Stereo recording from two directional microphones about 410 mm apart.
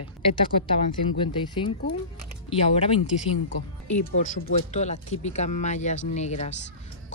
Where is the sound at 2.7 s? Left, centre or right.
Centre.